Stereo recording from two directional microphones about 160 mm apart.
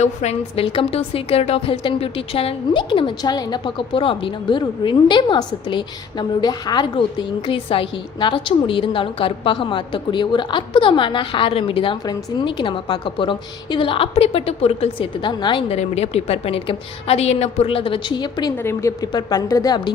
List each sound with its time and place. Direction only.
0.0 s a woman's voice: 45° left (ahead or behind)
15.8 s a woman's voice: 40° left (ahead or behind)
18.5 s a woman's voice: 15° left (ahead or behind)